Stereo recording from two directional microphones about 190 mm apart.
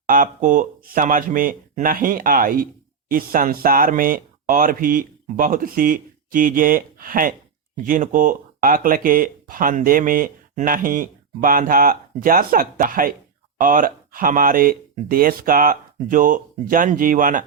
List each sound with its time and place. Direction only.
0.1 s speech: 45° right (ahead or behind)